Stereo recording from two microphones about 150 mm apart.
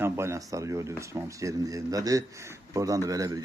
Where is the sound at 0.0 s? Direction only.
20° right (ahead or behind).